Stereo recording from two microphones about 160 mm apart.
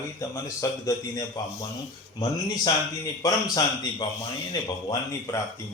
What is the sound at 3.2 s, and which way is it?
Speech, 25° left (ahead or behind).